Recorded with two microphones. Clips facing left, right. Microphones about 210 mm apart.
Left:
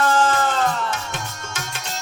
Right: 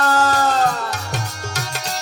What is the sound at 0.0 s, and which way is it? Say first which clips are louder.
Music: right 1 dB; 40° right (ahead or behind).